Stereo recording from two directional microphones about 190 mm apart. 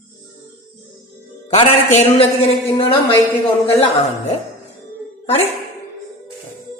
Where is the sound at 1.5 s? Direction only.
30° left (ahead or behind).